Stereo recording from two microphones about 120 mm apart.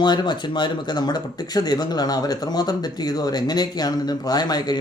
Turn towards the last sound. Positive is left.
turn(degrees=35)  # may be behind; listen again after turning